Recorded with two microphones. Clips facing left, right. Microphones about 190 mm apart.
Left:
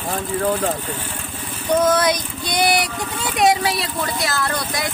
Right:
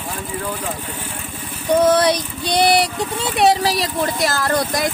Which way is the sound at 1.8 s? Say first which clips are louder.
Right 3 dB; 30° right (ahead or behind).